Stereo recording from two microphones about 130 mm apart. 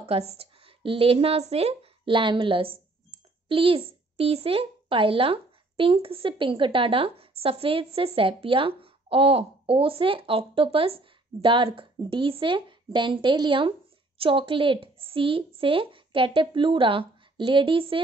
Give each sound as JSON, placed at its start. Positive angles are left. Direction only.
{"t": 0.0, "sound": "a woman's voice", "side_deg": -50}